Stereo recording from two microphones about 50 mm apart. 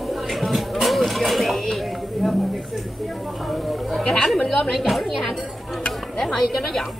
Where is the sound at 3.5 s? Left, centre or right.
Centre.